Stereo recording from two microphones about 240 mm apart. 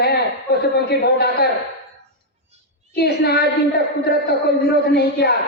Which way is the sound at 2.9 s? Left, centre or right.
Left.